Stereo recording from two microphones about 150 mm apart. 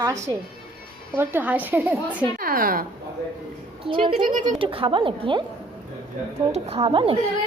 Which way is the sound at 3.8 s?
35° right (ahead or behind).